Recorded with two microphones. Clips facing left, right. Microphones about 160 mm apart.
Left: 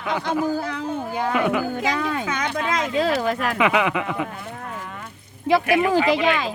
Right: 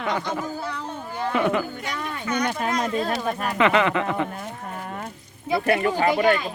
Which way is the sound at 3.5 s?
10° left (ahead or behind).